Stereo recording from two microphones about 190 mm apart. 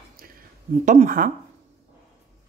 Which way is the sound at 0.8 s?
40° right (ahead or behind).